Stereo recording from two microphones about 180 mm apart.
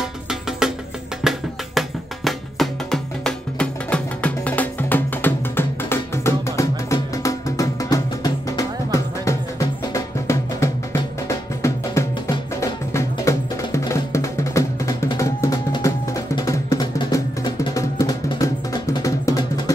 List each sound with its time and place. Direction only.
0.3 s music: 5° right (ahead or behind); by 19.7 s 20° left (ahead or behind)